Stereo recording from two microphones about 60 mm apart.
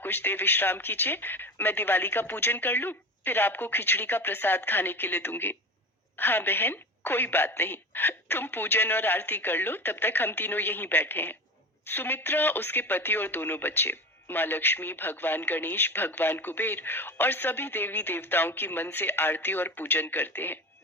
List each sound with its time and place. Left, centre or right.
0.0 s speech: left